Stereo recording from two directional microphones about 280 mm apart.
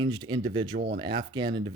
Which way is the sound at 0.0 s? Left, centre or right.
Centre.